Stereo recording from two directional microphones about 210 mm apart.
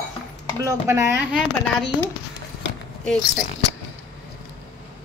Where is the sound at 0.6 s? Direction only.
10° right (ahead or behind).